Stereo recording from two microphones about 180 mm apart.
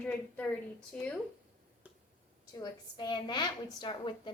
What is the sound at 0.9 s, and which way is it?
Speech, 5° left (ahead or behind).